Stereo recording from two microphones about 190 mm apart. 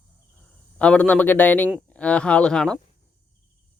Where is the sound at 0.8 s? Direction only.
5° left (ahead or behind).